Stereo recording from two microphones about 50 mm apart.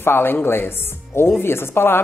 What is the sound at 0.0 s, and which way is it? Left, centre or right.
A woman's voice, left.